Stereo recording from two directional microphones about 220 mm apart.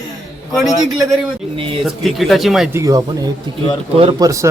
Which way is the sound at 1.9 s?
Centre (ahead or behind).